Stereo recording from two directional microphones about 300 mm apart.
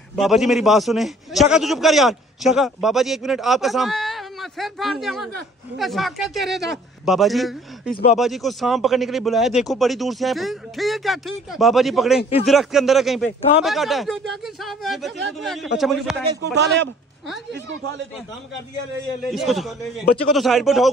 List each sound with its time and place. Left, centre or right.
0.2 s a man's voice: centre
16.5 s speech: right
19.3 s a man's voice: centre